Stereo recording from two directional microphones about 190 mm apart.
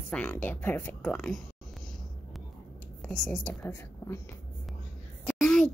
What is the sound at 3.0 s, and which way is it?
Speech, 5° left (ahead or behind).